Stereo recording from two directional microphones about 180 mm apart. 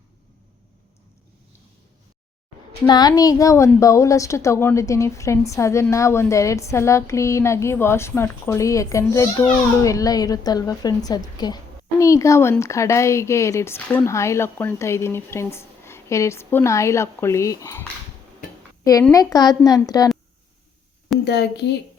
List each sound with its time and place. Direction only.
2.8 s a woman's voice: 25° left (ahead or behind)
19.1 s a woman's voice: 20° left (ahead or behind)
21.2 s a woman's voice: 65° left (ahead or behind)